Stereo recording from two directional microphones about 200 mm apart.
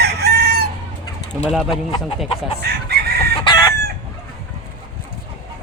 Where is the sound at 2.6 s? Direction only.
55° right (ahead or behind).